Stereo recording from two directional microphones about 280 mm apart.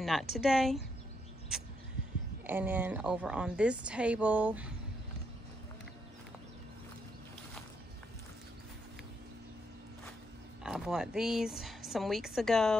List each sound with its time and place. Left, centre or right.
0.0 s a woman's voice: centre
2.4 s a woman's voice: centre
10.6 s a woman's voice: centre